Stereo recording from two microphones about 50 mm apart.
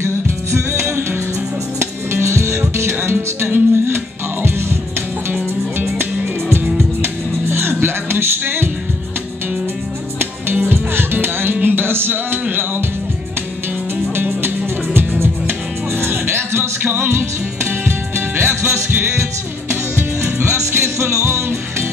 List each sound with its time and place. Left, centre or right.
0.0 s music: right
1.8 s music: right
3.4 s music: right
10.1 s music: right
14.1 s speech: right
15.0 s music: right
17.1 s music: right
18.6 s music: right